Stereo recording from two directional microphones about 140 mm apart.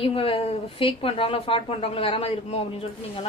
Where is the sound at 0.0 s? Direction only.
40° left (ahead or behind).